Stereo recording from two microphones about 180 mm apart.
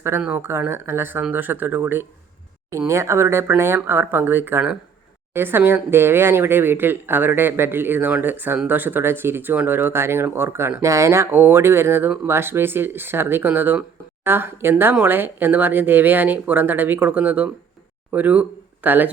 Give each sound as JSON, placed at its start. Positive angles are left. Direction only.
{"t": 0.0, "sound": "speech", "side_deg": -10}